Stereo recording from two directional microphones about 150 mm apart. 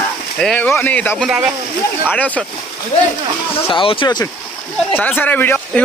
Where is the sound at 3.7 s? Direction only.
35° left (ahead or behind).